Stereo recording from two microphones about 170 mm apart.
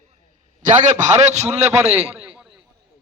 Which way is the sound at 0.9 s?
45° right (ahead or behind).